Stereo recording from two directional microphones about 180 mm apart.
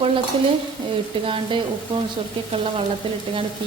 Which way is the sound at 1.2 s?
30° right (ahead or behind).